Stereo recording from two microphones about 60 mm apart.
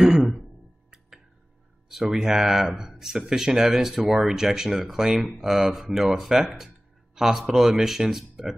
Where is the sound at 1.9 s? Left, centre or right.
Centre.